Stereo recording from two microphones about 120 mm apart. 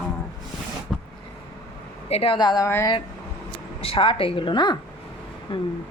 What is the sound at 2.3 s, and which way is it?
Speech, 35° left (ahead or behind).